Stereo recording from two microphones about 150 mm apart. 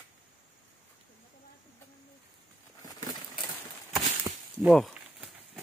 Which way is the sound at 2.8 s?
25° left (ahead or behind).